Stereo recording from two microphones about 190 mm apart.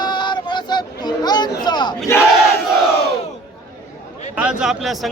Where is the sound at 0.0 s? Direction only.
25° left (ahead or behind).